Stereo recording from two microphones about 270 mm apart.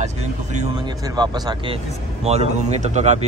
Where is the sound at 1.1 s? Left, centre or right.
Centre.